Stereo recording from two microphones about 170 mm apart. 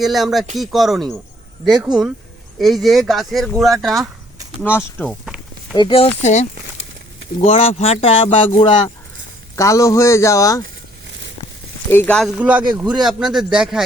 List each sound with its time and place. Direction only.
0.0 s speech: centre (ahead or behind)
2.6 s speech: centre (ahead or behind)
4.6 s speech: 10° left (ahead or behind)
5.0 s a sound: 5° right (ahead or behind)
5.7 s speech: 30° left (ahead or behind)
9.6 s speech: 20° left (ahead or behind)
11.9 s speech: 10° left (ahead or behind)
12.2 s speech: 5° right (ahead or behind)